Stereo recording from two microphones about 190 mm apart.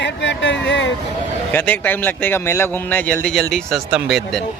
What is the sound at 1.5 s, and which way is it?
A man's voice, 10° left (ahead or behind).